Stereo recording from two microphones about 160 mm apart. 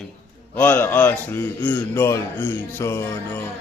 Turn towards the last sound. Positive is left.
turn(degrees=15)  # may be behind; listen again after turning